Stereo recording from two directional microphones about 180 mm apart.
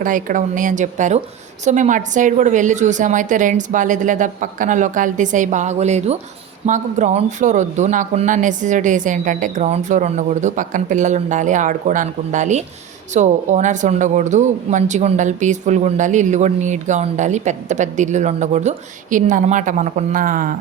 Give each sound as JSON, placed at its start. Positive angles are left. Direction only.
{"t": 0.0, "sound": "a man's voice", "side_deg": -45}